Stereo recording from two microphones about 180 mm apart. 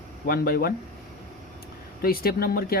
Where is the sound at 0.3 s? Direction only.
55° left (ahead or behind).